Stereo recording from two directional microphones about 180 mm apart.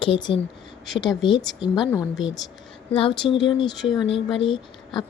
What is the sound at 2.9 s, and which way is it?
Speech, 30° left (ahead or behind).